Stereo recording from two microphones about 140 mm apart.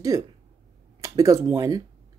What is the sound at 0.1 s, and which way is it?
Speech, 25° right (ahead or behind).